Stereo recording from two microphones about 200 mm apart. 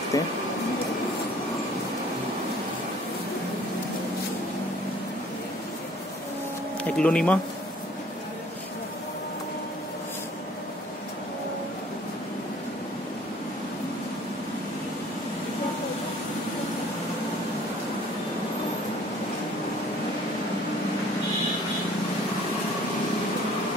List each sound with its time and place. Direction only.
0.1 s speech: 15° left (ahead or behind)
6.8 s speech: 5° left (ahead or behind)